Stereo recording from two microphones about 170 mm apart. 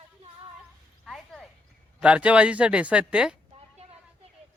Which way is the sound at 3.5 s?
35° right (ahead or behind).